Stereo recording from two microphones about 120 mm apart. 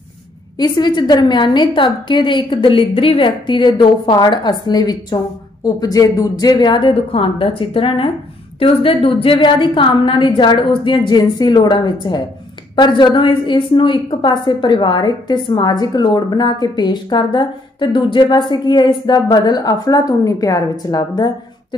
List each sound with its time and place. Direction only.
0.6 s a woman's voice: 35° left (ahead or behind)